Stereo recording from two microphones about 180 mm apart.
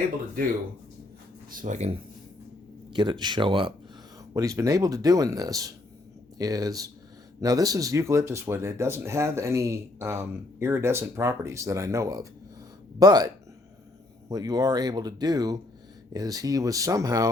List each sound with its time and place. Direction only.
1.5 s speech: 45° right (ahead or behind)
2.9 s speech: 25° right (ahead or behind)
4.4 s speech: 15° right (ahead or behind)